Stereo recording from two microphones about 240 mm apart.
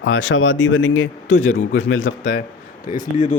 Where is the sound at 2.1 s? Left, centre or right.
Left.